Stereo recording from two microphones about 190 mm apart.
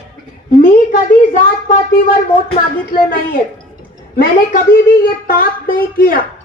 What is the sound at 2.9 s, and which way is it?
Speech, 50° left (ahead or behind).